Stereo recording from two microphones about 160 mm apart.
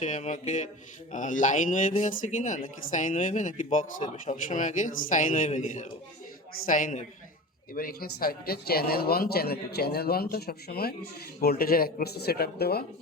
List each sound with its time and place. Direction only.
0.0 s speech: 50° left (ahead or behind)
7.7 s speech: 65° left (ahead or behind)